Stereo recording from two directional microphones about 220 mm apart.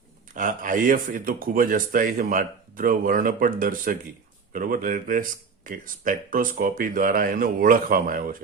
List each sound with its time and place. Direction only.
0.3 s speech: 35° right (ahead or behind)